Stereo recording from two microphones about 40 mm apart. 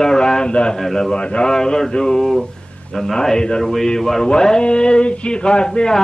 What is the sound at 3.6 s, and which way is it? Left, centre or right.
Speech, centre.